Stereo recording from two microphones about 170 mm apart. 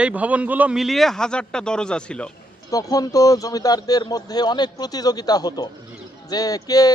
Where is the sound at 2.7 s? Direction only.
20° left (ahead or behind).